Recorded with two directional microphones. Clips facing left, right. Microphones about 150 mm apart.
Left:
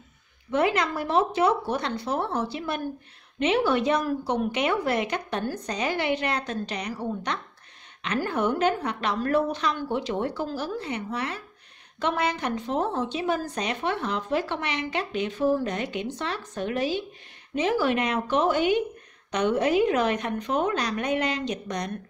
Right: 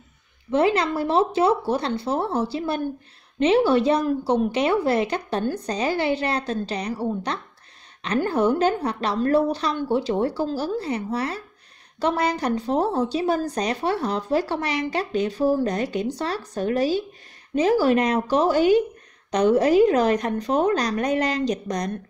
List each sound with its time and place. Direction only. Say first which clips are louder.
0.5 s a woman's voice: right 4 dB; 30° right (ahead or behind)